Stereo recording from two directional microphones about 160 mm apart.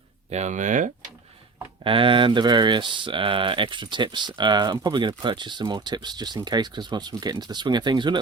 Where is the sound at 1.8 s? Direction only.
35° right (ahead or behind).